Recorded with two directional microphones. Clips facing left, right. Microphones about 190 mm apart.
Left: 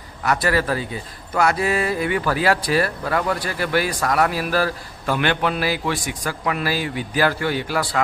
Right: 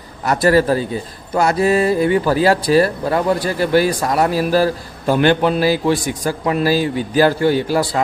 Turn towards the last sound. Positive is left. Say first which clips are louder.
# right 6 dB
turn(degrees=-35)  # may be behind; listen again after turning